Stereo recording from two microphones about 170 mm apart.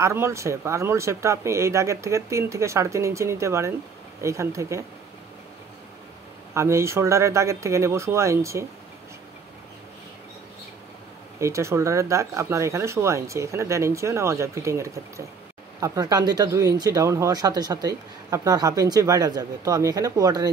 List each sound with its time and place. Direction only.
0.0 s speech: 15° right (ahead or behind)
6.5 s speech: 15° right (ahead or behind)
11.3 s speech: 15° right (ahead or behind)